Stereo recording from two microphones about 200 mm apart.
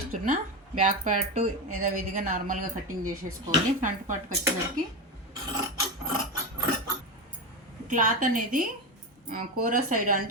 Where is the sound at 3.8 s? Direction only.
40° right (ahead or behind).